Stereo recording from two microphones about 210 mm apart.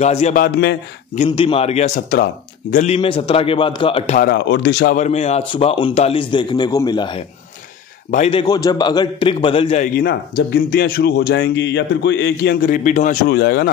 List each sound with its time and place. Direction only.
0.0 s a man's voice: 30° left (ahead or behind)
0.4 s speech: 55° left (ahead or behind)
1.1 s a man's voice: 30° left (ahead or behind)
4.2 s speech: 55° left (ahead or behind)
4.9 s a man's voice: 30° left (ahead or behind)
9.9 s speech: 50° left (ahead or behind)
12.6 s a man's voice: 40° left (ahead or behind)